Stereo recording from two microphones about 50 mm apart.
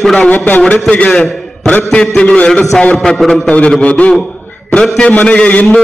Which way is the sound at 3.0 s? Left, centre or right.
Centre.